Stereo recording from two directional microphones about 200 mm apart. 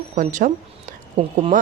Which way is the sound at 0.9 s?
35° right (ahead or behind).